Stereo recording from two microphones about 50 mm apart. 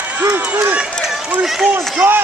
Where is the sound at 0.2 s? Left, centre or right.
Right.